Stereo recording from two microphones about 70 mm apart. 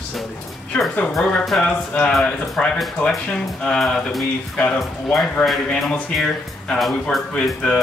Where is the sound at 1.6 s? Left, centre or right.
Centre.